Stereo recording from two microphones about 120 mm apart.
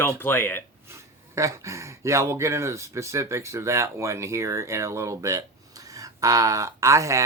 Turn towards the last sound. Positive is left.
turn(degrees=-25)  # may be behind; listen again after turning